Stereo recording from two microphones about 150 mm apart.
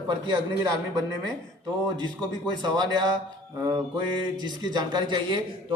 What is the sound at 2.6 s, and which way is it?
Speech, 30° right (ahead or behind).